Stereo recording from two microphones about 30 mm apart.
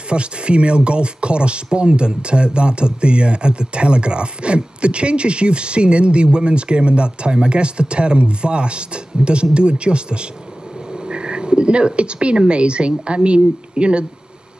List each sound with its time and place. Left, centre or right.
0.1 s speech: right